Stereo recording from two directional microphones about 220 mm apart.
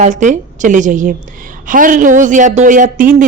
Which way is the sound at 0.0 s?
35° right (ahead or behind).